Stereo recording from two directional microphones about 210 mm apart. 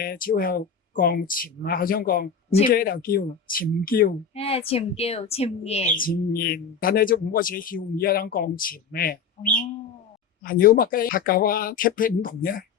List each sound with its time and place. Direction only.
0.0 s speech: 45° left (ahead or behind)
2.5 s speech: 30° left (ahead or behind)
2.7 s speech: 45° left (ahead or behind)
4.4 s a woman's voice: 30° left (ahead or behind)
6.3 s speech: 45° left (ahead or behind)